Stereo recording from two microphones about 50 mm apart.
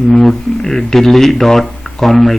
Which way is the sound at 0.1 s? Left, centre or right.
Centre.